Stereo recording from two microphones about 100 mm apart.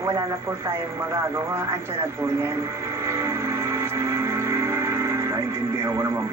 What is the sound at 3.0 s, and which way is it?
Music, 30° right (ahead or behind).